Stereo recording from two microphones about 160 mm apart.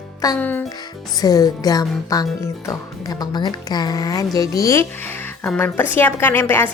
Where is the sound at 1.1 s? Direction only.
25° left (ahead or behind).